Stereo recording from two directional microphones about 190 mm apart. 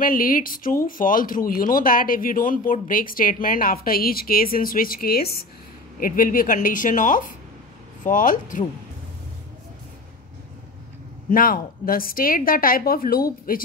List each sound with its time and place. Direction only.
0.0 s speech: 50° left (ahead or behind)
11.2 s speech: 45° left (ahead or behind)